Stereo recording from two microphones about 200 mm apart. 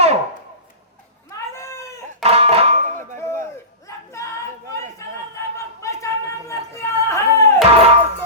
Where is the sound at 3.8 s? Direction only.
15° left (ahead or behind).